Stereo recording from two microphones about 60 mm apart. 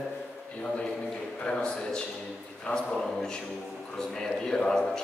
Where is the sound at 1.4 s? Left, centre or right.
Centre.